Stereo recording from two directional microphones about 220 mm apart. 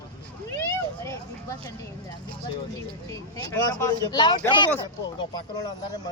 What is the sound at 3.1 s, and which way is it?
Speech, 15° left (ahead or behind).